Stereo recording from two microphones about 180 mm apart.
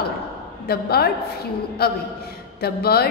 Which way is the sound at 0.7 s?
60° left (ahead or behind).